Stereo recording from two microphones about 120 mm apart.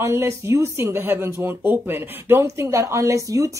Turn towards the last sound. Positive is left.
turn(degrees=-25)  # may be behind; listen again after turning